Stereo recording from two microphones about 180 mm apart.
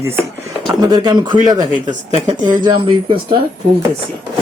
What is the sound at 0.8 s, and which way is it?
Speech, 20° right (ahead or behind).